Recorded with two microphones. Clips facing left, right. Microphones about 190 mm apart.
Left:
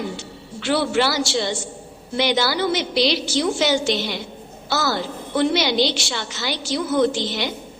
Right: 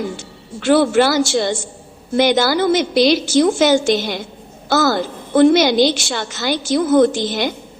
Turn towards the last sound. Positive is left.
turn(degrees=-50)  # may be behind; listen again after turning